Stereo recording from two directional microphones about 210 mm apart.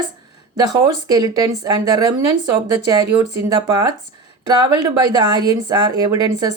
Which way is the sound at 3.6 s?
20° right (ahead or behind).